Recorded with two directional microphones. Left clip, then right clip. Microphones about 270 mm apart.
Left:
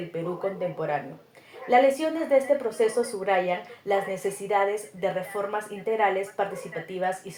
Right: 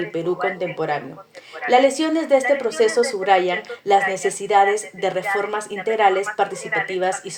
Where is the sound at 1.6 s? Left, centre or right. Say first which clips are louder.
Right 4 dB; right.